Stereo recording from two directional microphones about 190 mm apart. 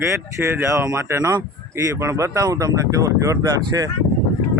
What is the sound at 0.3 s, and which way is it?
Speech, 15° right (ahead or behind).